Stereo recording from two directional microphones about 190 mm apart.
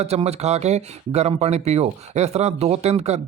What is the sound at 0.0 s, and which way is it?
Speech, 35° right (ahead or behind).